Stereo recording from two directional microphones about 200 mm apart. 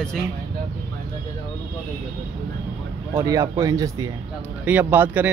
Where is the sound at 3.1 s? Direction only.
15° right (ahead or behind).